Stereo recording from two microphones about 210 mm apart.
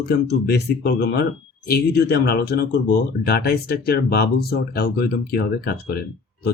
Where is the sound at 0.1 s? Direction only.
50° left (ahead or behind).